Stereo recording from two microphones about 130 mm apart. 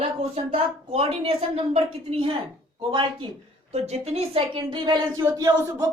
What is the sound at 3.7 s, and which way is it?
Speech, 55° right (ahead or behind).